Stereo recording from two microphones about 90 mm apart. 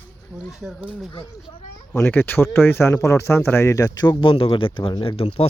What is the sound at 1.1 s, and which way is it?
Speech, 60° left (ahead or behind).